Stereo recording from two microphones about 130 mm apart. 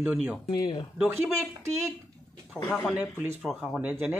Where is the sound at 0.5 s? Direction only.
35° left (ahead or behind).